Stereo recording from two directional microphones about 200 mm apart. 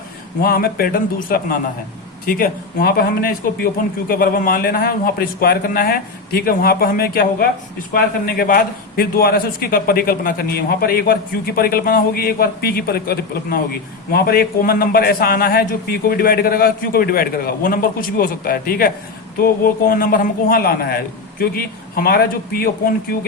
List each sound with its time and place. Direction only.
0.4 s a man's voice: 50° left (ahead or behind)